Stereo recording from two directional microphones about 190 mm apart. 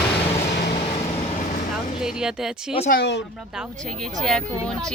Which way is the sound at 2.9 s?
55° left (ahead or behind).